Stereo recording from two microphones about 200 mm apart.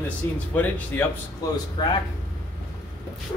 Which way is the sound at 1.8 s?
20° left (ahead or behind).